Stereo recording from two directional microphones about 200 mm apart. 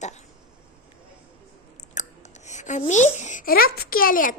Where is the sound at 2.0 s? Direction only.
35° left (ahead or behind).